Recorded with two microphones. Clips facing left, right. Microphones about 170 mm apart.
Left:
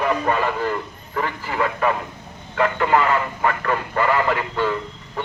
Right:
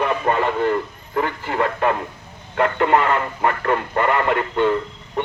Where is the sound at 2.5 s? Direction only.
35° right (ahead or behind).